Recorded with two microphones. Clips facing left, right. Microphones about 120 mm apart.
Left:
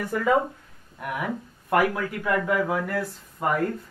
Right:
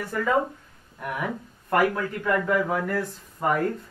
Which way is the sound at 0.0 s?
10° left (ahead or behind).